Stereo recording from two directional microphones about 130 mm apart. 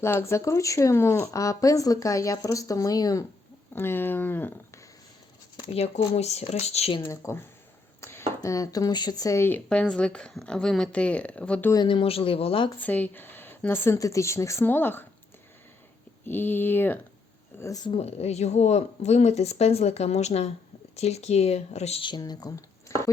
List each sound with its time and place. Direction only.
0.0 s speech: 20° left (ahead or behind)
3.8 s speech: 15° left (ahead or behind)
5.6 s speech: 50° left (ahead or behind)
7.1 s speech: 20° left (ahead or behind)
8.0 s a sound: 20° left (ahead or behind)
8.4 s speech: 25° left (ahead or behind)
9.6 s speech: 5° left (ahead or behind)
11.7 s speech: 35° left (ahead or behind)
12.8 s speech: 10° left (ahead or behind)
16.2 s speech: 15° left (ahead or behind)
17.8 s speech: 50° left (ahead or behind)
22.0 s speech: 35° left (ahead or behind)
22.9 s a sound: 25° left (ahead or behind)